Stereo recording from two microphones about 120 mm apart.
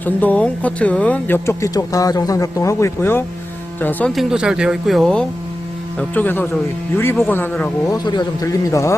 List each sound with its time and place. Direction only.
0.0 s speech: 15° left (ahead or behind)
1.5 s speech: 25° left (ahead or behind)
4.1 s speech: 5° right (ahead or behind)
6.0 s speech: 15° left (ahead or behind)
7.9 s speech: 35° left (ahead or behind)